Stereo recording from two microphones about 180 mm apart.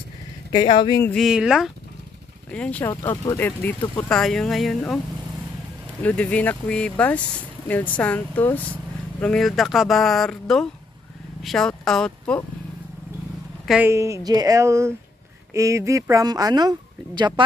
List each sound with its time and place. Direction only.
0.5 s speech: 25° left (ahead or behind)
1.1 s speech: centre (ahead or behind)
6.0 s speech: 5° left (ahead or behind)
13.7 s speech: 10° right (ahead or behind)